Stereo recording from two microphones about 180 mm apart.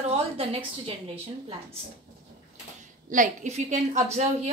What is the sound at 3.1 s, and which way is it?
A woman's voice, 45° right (ahead or behind).